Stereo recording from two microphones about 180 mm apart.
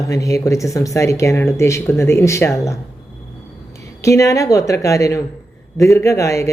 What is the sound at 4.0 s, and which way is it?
Speech, 15° left (ahead or behind).